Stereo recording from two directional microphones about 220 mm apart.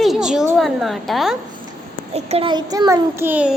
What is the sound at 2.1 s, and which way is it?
A child's voice, 25° right (ahead or behind).